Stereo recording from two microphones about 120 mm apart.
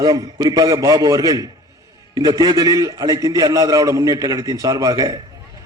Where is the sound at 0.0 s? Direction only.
30° right (ahead or behind).